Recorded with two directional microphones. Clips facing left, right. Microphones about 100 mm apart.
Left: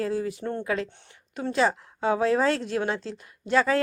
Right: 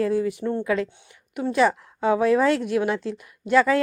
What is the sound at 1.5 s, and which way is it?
Speech, 25° left (ahead or behind).